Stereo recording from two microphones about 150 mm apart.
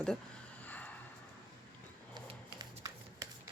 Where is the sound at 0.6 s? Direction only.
10° left (ahead or behind).